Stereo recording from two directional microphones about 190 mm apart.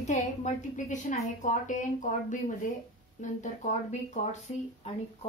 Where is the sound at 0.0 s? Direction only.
40° left (ahead or behind).